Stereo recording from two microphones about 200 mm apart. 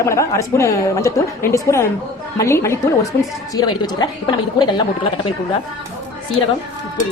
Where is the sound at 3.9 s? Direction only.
20° left (ahead or behind).